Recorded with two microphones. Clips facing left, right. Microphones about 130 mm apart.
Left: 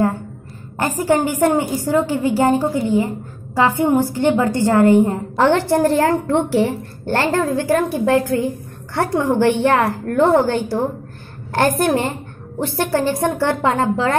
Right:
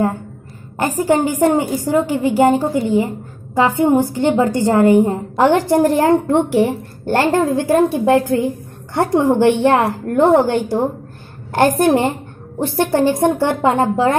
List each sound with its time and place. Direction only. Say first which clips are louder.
0.7 s a woman's voice: right 2 dB; 15° right (ahead or behind)